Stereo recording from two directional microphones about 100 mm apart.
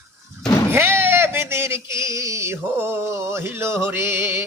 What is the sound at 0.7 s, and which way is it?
Speech, 25° right (ahead or behind).